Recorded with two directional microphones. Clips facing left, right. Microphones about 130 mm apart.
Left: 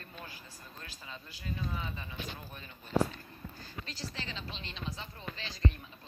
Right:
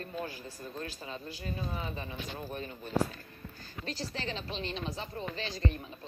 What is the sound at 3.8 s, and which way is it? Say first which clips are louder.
A woman's voice: right 7 dB; 50° right (ahead or behind).